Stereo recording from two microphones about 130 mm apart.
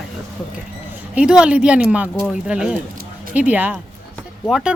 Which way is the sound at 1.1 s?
10° right (ahead or behind).